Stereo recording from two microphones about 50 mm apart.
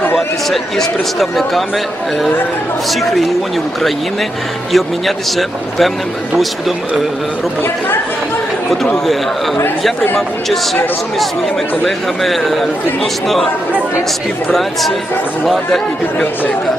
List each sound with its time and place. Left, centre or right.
0.5 s a man's voice: centre
2.9 s a man's voice: centre
4.7 s a man's voice: centre
11.9 s a man's voice: centre
14.5 s a man's voice: centre